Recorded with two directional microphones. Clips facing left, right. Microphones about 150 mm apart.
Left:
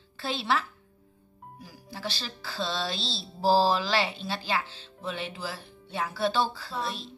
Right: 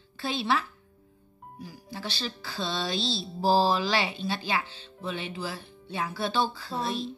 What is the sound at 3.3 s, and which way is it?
A woman's voice, 5° left (ahead or behind).